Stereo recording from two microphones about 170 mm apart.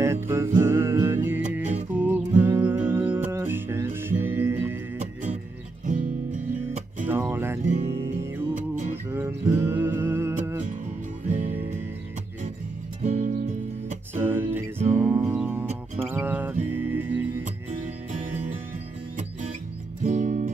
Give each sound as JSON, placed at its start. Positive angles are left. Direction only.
{"t": 0.0, "sound": "music", "side_deg": -15}
{"t": 4.9, "sound": "music", "side_deg": -45}
{"t": 7.1, "sound": "music", "side_deg": -15}
{"t": 8.5, "sound": "music", "side_deg": -45}
{"t": 9.1, "sound": "music", "side_deg": -10}
{"t": 13.0, "sound": "music", "side_deg": -50}
{"t": 14.1, "sound": "music", "side_deg": -10}
{"t": 17.6, "sound": "music", "side_deg": -40}
{"t": 20.0, "sound": "music", "side_deg": -45}